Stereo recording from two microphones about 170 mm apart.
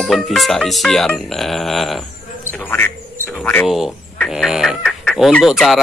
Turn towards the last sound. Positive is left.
turn(degrees=0)  # may be behind; listen again after turning